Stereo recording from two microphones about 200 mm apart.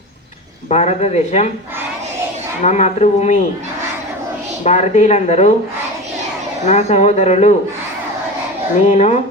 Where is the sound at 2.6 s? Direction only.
35° left (ahead or behind).